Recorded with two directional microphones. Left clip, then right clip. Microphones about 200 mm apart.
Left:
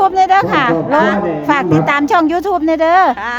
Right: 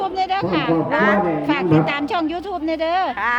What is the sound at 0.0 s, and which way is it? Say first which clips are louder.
A woman's voice: left 11 dB; 25° left (ahead or behind).